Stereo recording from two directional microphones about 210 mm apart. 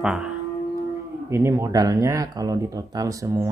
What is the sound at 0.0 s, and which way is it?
Music, 5° right (ahead or behind).